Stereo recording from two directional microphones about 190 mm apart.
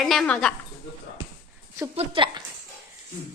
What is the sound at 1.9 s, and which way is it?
Speech, 30° right (ahead or behind).